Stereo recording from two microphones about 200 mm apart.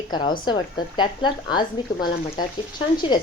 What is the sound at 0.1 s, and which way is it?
A woman's voice, 20° left (ahead or behind).